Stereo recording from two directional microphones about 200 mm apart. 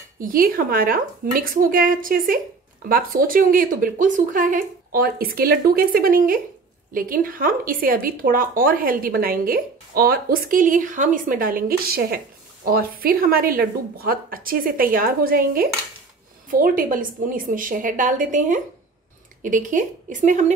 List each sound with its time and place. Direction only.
0.2 s a woman's voice: 45° right (ahead or behind)